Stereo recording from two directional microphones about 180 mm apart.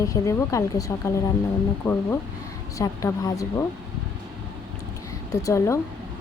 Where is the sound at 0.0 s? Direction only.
15° left (ahead or behind).